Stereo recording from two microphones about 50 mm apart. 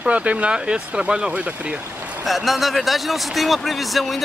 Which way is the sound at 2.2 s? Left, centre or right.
Centre.